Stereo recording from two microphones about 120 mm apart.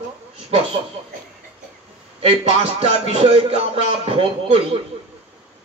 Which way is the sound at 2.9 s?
60° right (ahead or behind).